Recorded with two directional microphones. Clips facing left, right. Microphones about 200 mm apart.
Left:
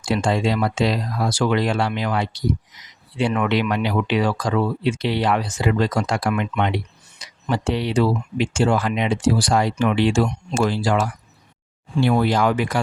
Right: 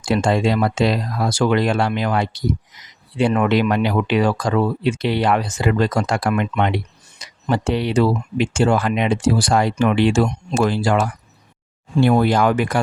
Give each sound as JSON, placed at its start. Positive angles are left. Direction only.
{"t": 0.1, "sound": "speech", "side_deg": -50}